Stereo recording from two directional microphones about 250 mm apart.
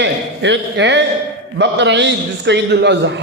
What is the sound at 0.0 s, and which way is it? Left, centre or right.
A man's voice, right.